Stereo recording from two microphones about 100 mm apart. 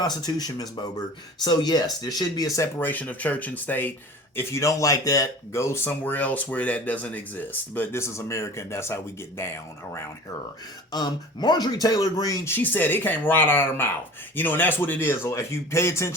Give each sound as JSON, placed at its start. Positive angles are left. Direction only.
{"t": 0.0, "sound": "speech", "side_deg": 40}
{"t": 2.7, "sound": "speech", "side_deg": 20}
{"t": 10.9, "sound": "speech", "side_deg": 45}
{"t": 12.5, "sound": "speech", "side_deg": 20}